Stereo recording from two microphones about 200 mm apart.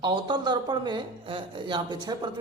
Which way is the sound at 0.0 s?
20° right (ahead or behind).